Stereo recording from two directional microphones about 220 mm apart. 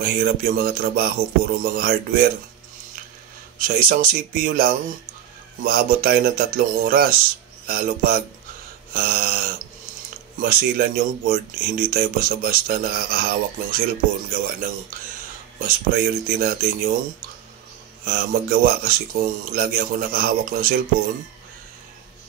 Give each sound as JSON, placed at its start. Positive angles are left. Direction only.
{"t": 0.0, "sound": "speech", "side_deg": -40}
{"t": 3.5, "sound": "speech", "side_deg": -40}
{"t": 8.9, "sound": "a sound", "side_deg": -45}
{"t": 10.4, "sound": "speech", "side_deg": -40}
{"t": 18.0, "sound": "speech", "side_deg": -45}